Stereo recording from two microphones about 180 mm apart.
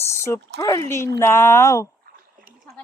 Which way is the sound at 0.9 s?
15° left (ahead or behind).